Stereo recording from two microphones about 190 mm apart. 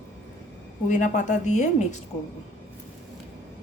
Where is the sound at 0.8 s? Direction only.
40° left (ahead or behind).